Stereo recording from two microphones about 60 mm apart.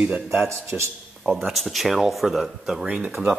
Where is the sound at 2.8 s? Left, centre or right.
Right.